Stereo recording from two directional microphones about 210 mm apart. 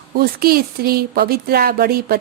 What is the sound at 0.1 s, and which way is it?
Speech, 45° right (ahead or behind).